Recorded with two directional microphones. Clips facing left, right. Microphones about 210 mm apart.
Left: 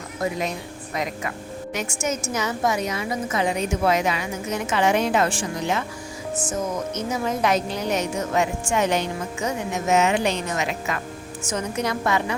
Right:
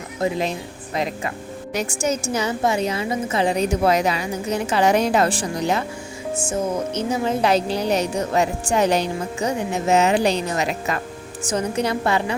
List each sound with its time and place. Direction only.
0.2 s a woman's voice: 30° right (ahead or behind)